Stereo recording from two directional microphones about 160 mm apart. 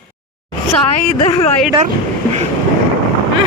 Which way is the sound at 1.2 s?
40° left (ahead or behind).